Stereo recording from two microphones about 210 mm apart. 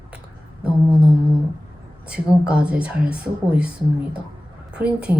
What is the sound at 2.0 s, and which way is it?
Speech, 5° right (ahead or behind).